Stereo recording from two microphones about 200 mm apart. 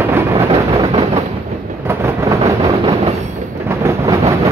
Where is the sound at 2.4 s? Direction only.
30° right (ahead or behind).